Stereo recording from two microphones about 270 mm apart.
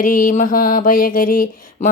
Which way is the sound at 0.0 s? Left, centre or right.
Left.